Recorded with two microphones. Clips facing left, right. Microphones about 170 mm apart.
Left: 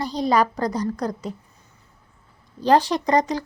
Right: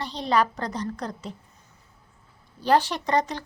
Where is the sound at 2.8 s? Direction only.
35° left (ahead or behind).